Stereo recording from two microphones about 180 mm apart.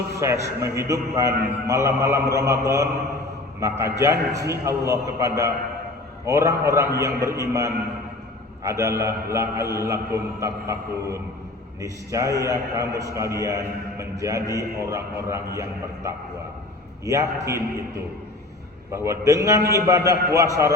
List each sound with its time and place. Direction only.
0.2 s a man's voice: 15° right (ahead or behind)
17.1 s a man's voice: 15° right (ahead or behind)